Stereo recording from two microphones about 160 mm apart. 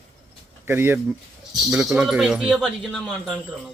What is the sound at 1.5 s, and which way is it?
Speech, 5° right (ahead or behind).